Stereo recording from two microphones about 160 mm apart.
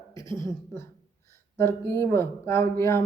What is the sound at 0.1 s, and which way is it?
Speech, 20° left (ahead or behind).